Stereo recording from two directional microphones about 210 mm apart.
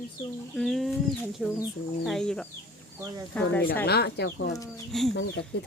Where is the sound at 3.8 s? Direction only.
50° left (ahead or behind).